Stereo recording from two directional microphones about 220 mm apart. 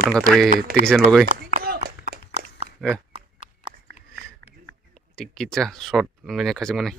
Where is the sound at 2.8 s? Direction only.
Centre (ahead or behind).